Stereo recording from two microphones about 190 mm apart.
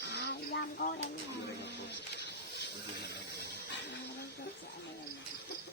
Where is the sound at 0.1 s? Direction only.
60° left (ahead or behind).